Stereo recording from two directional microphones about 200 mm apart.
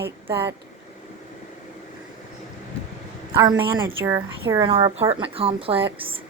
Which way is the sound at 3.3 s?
15° right (ahead or behind).